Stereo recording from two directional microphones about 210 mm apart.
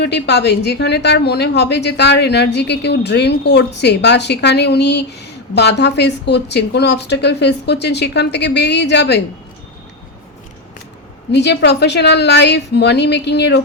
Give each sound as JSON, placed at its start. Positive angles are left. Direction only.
{"t": 0.0, "sound": "a woman's voice", "side_deg": 55}
{"t": 11.3, "sound": "a woman's voice", "side_deg": 55}